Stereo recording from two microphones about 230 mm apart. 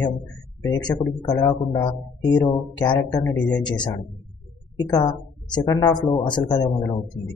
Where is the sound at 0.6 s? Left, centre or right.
Centre.